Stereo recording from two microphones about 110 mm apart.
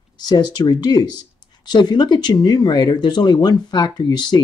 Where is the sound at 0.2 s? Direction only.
40° left (ahead or behind).